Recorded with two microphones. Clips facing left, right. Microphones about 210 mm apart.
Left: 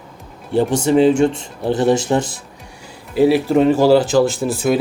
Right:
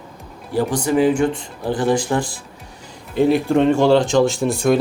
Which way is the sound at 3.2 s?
5° left (ahead or behind).